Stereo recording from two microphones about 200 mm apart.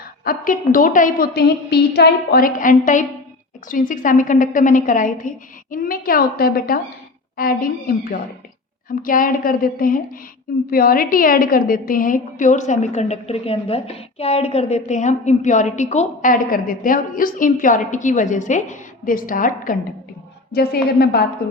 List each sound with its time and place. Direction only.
0.3 s a woman's voice: 45° left (ahead or behind)